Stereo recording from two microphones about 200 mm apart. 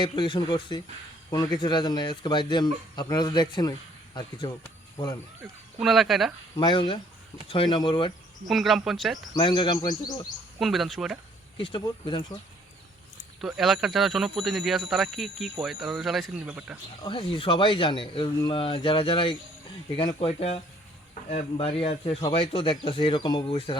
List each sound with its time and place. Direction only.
0.0 s speech: 25° left (ahead or behind)
5.8 s speech: centre (ahead or behind)
6.6 s speech: 25° left (ahead or behind)
8.4 s speech: centre (ahead or behind)
9.3 s speech: 20° left (ahead or behind)
10.6 s speech: centre (ahead or behind)
11.5 s speech: 25° left (ahead or behind)
13.4 s speech: centre (ahead or behind)
17.0 s speech: 25° left (ahead or behind)